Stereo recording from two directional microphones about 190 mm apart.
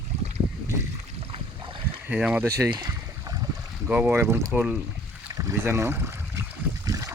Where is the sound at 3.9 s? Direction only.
10° right (ahead or behind).